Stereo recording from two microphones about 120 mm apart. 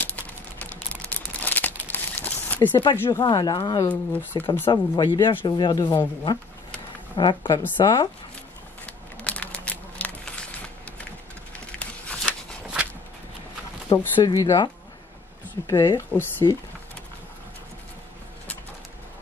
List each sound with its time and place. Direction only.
0.0 s crumpling: 15° left (ahead or behind)
2.7 s speech: 40° left (ahead or behind)
3.9 s speech: 15° left (ahead or behind)
4.6 s speech: 40° left (ahead or behind)
8.8 s a sound: 10° left (ahead or behind)
13.8 s speech: 35° left (ahead or behind)
16.1 s speech: 15° left (ahead or behind)